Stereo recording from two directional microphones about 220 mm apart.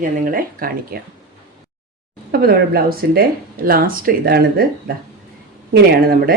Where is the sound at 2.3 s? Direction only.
45° right (ahead or behind).